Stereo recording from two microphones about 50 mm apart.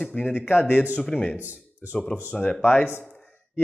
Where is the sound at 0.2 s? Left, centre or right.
Left.